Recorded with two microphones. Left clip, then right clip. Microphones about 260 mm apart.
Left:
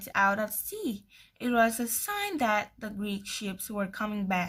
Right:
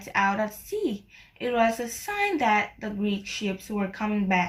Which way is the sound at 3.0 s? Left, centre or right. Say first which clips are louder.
Right 6 dB; left.